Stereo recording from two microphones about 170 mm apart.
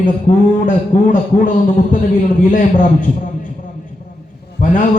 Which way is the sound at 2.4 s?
50° left (ahead or behind).